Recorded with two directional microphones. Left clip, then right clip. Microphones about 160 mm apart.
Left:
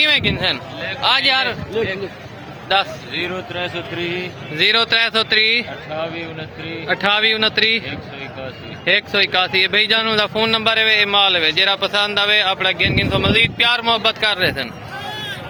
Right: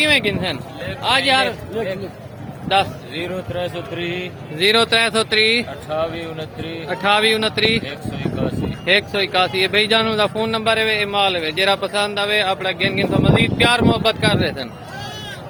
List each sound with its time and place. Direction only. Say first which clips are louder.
0.0 s speech: left 1 dB; 10° right (ahead or behind)
3.2 s speech: left 1 dB; 90° right
3.9 s a man's voice: left 2 dB; 45° right (ahead or behind)
4.5 s speech: even; 10° right (ahead or behind)
5.9 s speech: right 4 dB; 40° right (ahead or behind)
6.8 s speech: even; 5° right (ahead or behind)
8.8 s speech: left 2 dB; 5° right (ahead or behind)